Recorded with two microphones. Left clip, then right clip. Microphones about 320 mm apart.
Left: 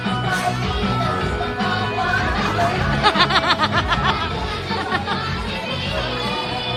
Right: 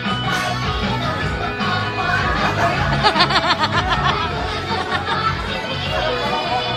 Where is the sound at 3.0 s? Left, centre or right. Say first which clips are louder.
Even; centre.